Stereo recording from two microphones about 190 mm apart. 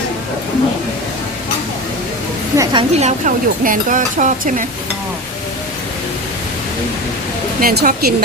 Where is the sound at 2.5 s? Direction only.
15° right (ahead or behind).